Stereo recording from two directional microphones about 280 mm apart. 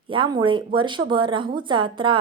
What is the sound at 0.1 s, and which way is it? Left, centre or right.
Speech, centre.